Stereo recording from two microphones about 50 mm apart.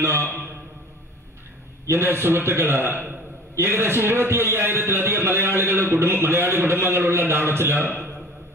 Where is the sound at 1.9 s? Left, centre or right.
Right.